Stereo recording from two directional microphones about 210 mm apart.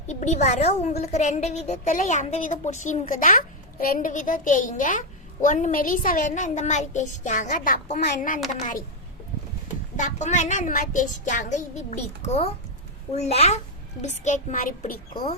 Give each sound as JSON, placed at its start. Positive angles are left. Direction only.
{"t": 0.1, "sound": "a woman's voice", "side_deg": 35}
{"t": 10.0, "sound": "a woman's voice", "side_deg": 35}